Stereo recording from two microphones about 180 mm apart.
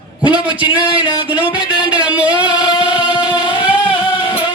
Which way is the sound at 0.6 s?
25° left (ahead or behind).